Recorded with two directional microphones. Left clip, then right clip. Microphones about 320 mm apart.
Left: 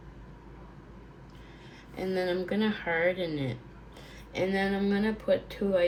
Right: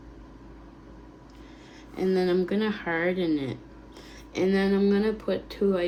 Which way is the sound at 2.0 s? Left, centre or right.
Centre.